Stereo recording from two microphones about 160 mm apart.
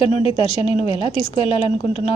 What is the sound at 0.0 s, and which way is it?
A woman's voice, 35° left (ahead or behind).